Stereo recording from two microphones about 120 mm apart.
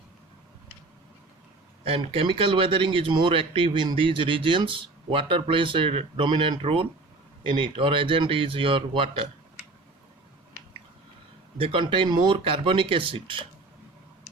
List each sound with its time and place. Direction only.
2.1 s speech: 45° right (ahead or behind)
11.5 s speech: 45° right (ahead or behind)